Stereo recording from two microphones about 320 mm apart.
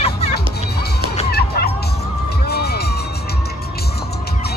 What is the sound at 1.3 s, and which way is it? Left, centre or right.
Music, left.